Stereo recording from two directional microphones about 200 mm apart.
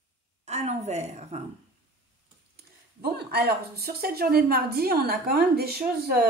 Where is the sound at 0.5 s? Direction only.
35° right (ahead or behind).